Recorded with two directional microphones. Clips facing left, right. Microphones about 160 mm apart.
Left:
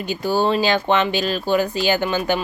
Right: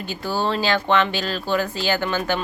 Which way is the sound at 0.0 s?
15° left (ahead or behind).